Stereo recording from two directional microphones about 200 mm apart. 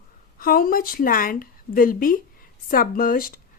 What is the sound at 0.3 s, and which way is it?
A woman's voice, 45° left (ahead or behind).